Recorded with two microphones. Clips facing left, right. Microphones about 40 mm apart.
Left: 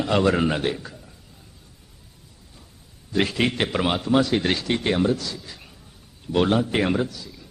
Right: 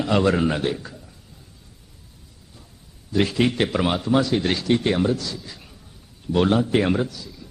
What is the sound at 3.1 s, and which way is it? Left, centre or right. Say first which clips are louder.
Speech: right 2 dB; left.